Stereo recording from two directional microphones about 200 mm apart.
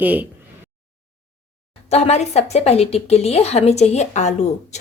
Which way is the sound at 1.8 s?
30° left (ahead or behind).